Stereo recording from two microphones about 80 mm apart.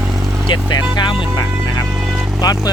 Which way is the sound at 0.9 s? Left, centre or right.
Left.